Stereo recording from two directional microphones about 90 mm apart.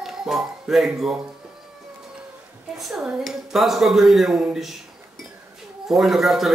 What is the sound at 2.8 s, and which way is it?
Speech, centre (ahead or behind).